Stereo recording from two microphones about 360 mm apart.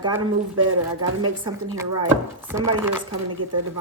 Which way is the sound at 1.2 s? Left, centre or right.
Centre.